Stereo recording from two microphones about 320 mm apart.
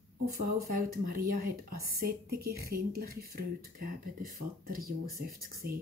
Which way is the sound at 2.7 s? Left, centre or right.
Right.